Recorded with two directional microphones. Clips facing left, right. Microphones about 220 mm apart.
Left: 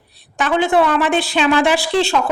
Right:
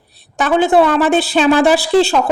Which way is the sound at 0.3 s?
35° right (ahead or behind).